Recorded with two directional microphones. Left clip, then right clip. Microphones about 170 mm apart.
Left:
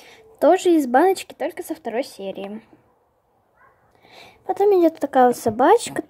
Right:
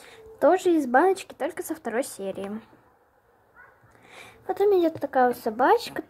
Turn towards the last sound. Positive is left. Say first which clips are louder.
# left 5 dB
turn(degrees=35)  # may be behind; listen again after turning